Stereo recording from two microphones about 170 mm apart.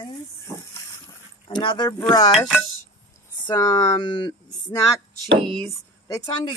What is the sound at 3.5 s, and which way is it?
Speech, 25° left (ahead or behind).